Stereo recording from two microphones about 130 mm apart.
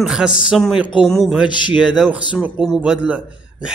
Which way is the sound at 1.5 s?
35° left (ahead or behind).